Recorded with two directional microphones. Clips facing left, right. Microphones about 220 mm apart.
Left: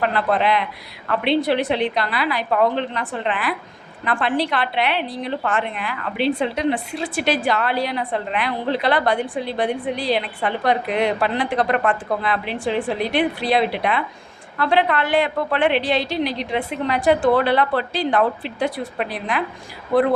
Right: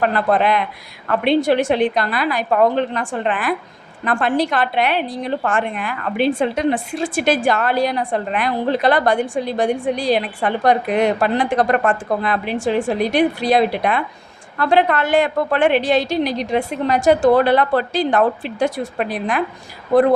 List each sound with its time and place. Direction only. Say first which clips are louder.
0.0 s a woman's voice: right 3 dB; 45° right (ahead or behind)